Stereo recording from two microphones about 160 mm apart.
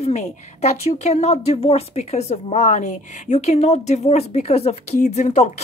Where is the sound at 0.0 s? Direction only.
45° left (ahead or behind).